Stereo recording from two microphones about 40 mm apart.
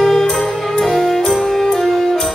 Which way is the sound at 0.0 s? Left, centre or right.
Centre.